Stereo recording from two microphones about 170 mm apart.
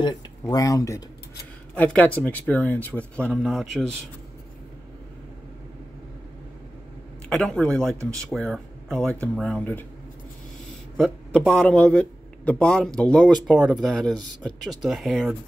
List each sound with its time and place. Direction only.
0.0 s speech: 25° left (ahead or behind)
1.8 s speech: 5° left (ahead or behind)
7.2 s a man's voice: 5° left (ahead or behind)
11.0 s a man's voice: 5° left (ahead or behind)